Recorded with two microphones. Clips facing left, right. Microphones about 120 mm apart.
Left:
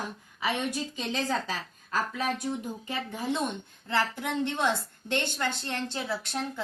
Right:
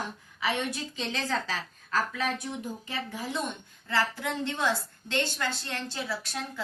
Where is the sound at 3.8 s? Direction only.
20° left (ahead or behind).